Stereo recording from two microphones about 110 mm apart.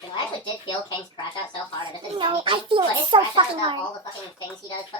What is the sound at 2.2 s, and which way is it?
A child's voice, 50° right (ahead or behind).